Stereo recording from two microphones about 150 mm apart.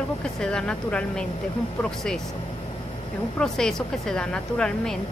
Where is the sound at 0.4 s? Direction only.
5° left (ahead or behind).